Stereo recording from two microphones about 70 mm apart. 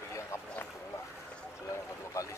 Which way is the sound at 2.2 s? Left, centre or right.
Left.